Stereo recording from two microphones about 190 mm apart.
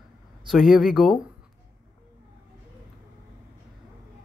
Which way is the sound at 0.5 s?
Centre (ahead or behind).